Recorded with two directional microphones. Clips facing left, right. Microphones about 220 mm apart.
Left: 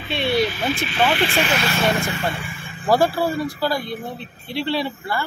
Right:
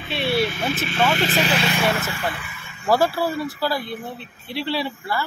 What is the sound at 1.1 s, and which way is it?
Speech, 40° right (ahead or behind).